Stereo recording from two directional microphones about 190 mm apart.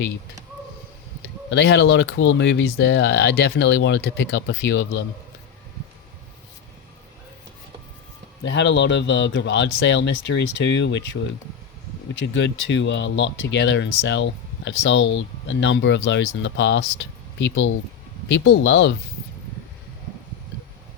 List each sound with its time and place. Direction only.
1.5 s speech: 65° left (ahead or behind)
8.4 s speech: 70° left (ahead or behind)